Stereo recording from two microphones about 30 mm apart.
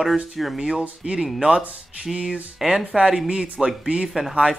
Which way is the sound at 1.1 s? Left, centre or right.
Right.